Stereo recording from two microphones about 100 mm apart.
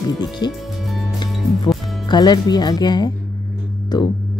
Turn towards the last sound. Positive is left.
turn(degrees=45)  # may be behind; listen again after turning